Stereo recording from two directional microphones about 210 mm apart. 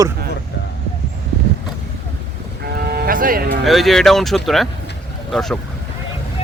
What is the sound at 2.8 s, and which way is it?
Cattle, 50° right (ahead or behind).